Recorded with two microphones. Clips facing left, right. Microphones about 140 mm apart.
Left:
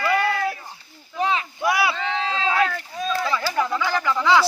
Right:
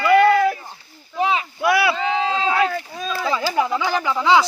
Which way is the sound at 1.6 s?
65° right (ahead or behind).